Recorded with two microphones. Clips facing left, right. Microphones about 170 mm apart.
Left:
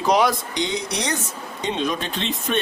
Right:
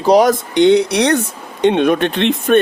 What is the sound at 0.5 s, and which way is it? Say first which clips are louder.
Speech: right 15 dB; 65° right (ahead or behind).